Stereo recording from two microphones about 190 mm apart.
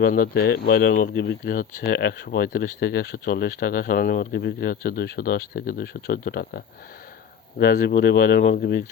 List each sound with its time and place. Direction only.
0.0 s speech: 50° left (ahead or behind)
7.6 s speech: 50° left (ahead or behind)